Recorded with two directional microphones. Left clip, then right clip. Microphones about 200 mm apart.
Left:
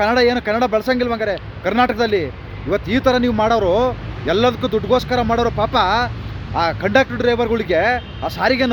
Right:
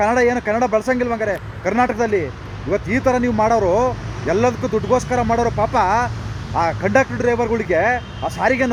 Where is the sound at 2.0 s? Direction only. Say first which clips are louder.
Left 1 dB; 20° left (ahead or behind).